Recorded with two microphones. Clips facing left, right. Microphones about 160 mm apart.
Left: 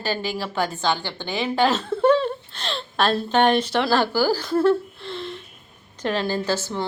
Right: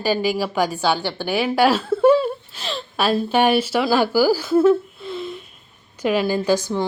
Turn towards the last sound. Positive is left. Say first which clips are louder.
# right 5 dB
turn(degrees=-15)  # may be behind; listen again after turning